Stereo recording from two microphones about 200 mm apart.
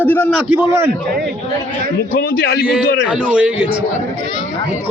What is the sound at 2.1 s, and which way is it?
Speech, 50° left (ahead or behind).